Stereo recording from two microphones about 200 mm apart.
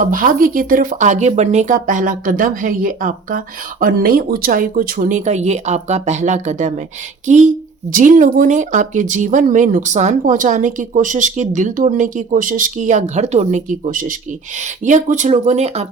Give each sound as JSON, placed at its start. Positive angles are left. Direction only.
{"t": 0.0, "sound": "speech", "side_deg": -40}